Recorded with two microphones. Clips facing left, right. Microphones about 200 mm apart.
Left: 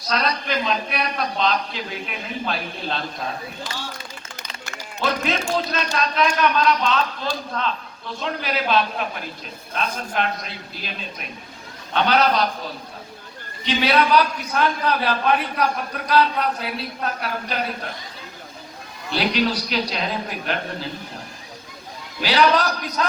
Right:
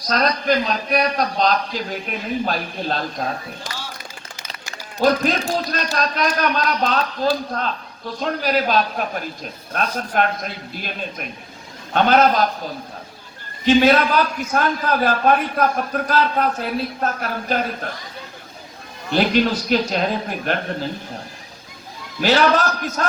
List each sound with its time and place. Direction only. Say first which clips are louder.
0.1 s a man's voice: right 5 dB; 45° right (ahead or behind)
4.7 s music: right 7 dB; 40° right (ahead or behind)
5.5 s a man's voice: right 1 dB; 40° right (ahead or behind)
11.9 s a man's voice: right 4 dB; 50° right (ahead or behind)
13.7 s a man's voice: right 5 dB; 45° right (ahead or behind)
19.1 s a man's voice: right 4 dB; 45° right (ahead or behind)
22.2 s a man's voice: right 2 dB; 45° right (ahead or behind)